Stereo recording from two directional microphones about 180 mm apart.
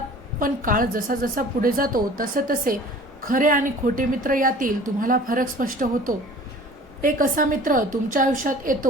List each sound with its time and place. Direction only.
0.3 s a woman's voice: 50° right (ahead or behind)